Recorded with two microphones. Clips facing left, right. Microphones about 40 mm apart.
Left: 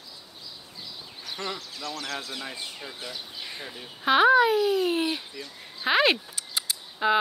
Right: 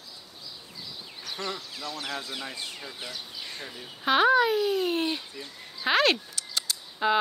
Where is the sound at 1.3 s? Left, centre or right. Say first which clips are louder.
Even; centre.